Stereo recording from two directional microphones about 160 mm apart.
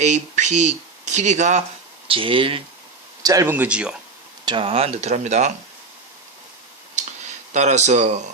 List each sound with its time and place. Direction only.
0.0 s speech: 45° right (ahead or behind)
2.0 s speech: 35° right (ahead or behind)
3.2 s speech: 20° right (ahead or behind)
3.5 s speech: 10° right (ahead or behind)
4.4 s speech: 35° right (ahead or behind)
6.9 s a sound: 45° right (ahead or behind)